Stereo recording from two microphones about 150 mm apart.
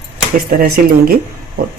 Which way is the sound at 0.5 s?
80° right.